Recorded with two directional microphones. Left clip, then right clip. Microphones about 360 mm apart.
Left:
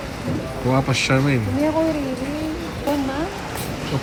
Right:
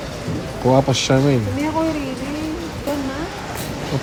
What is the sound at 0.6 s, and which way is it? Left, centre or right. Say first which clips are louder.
Speech: right 4 dB; centre.